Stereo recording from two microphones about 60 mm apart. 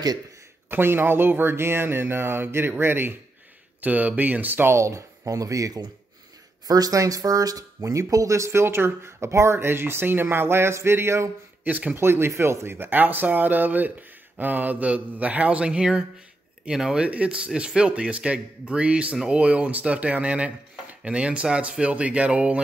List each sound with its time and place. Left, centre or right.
0.7 s speech: right
3.8 s a man's voice: right
4.7 s speech: right
11.6 s a man's voice: right
12.0 s a man's voice: right; by 19.4 s centre
19.4 s a man's voice: right